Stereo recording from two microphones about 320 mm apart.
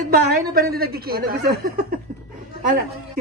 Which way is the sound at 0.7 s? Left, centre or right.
Right.